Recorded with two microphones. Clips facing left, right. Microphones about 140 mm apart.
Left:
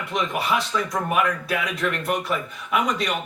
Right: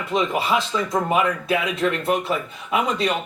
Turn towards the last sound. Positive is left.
turn(degrees=-30)  # may be behind; listen again after turning